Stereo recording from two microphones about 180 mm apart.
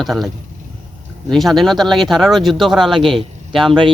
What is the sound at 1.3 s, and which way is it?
Speech, centre (ahead or behind).